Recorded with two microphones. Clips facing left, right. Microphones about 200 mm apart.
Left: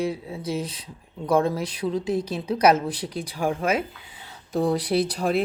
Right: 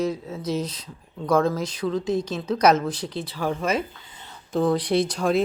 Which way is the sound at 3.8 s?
10° left (ahead or behind).